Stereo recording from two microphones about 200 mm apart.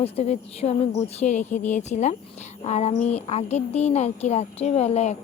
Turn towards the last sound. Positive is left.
turn(degrees=30)  # may be behind; listen again after turning